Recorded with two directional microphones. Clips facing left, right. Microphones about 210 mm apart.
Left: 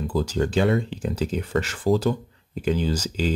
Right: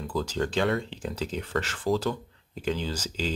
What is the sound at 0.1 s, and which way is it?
Speech, 10° left (ahead or behind).